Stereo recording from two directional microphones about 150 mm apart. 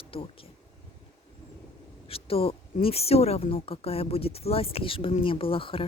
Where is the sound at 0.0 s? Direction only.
40° left (ahead or behind).